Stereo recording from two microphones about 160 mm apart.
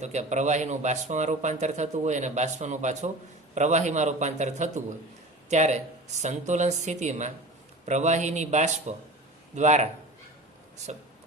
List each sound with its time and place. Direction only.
0.0 s speech: 45° right (ahead or behind)